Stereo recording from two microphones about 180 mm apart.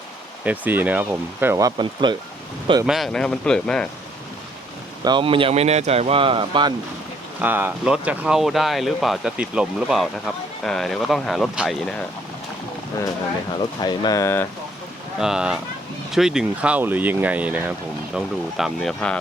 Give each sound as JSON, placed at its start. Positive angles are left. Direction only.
{"t": 0.4, "sound": "speech", "side_deg": -10}
{"t": 2.8, "sound": "speech", "side_deg": 0}
{"t": 5.0, "sound": "speech", "side_deg": -25}
{"t": 7.4, "sound": "speech", "side_deg": -10}
{"t": 13.6, "sound": "speech", "side_deg": 25}
{"t": 15.2, "sound": "speech", "side_deg": -5}